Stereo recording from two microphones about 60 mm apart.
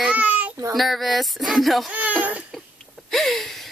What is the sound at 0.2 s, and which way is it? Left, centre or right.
Baby cry, right.